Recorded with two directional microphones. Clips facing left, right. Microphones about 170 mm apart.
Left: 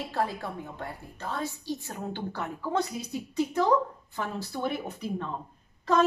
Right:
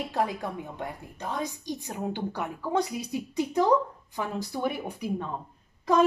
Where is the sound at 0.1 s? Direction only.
15° right (ahead or behind).